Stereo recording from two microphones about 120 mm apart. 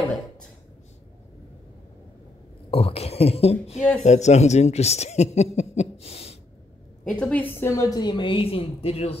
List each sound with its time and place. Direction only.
2.7 s speech: 55° left (ahead or behind)
4.0 s speech: 75° left (ahead or behind); by 6.3 s 55° left (ahead or behind)
7.1 s a woman's voice: 10° left (ahead or behind); by 9.2 s 55° left (ahead or behind)